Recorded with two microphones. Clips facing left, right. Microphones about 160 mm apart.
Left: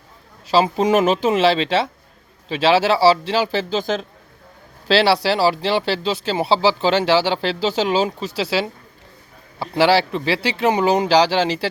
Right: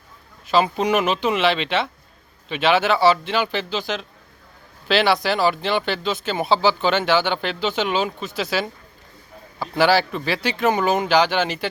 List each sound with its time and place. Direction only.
0.5 s speech: 35° left (ahead or behind)
4.9 s speech: 35° left (ahead or behind)